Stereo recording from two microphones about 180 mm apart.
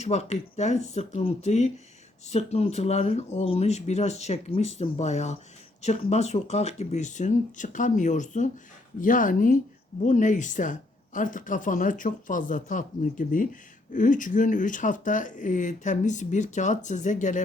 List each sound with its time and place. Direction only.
0.0 s speech: 40° left (ahead or behind)